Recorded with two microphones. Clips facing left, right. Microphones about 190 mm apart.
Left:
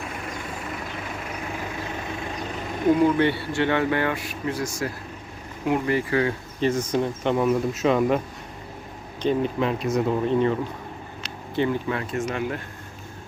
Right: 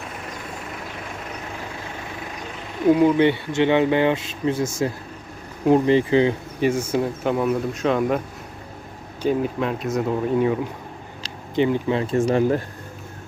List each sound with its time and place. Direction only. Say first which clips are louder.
3.0 s speech: right 3 dB; 15° right (ahead or behind)
6.6 s speech: right 1 dB; 10° right (ahead or behind)
9.2 s speech: right 1 dB; 5° right (ahead or behind)
11.5 s speech: right 4 dB; 20° right (ahead or behind); by 12.6 s 35° right (ahead or behind)